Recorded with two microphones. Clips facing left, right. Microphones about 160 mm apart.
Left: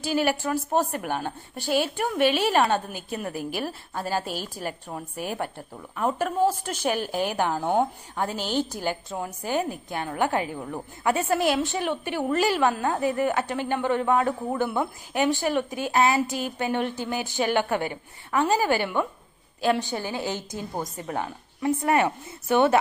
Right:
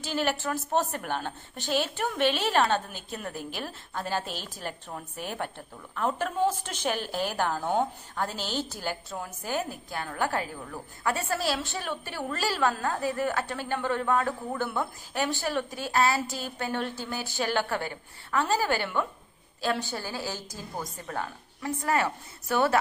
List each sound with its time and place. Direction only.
0.0 s a woman's voice: 10° left (ahead or behind)